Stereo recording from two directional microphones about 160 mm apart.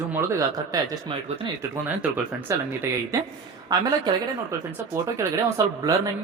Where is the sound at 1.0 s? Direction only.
35° right (ahead or behind).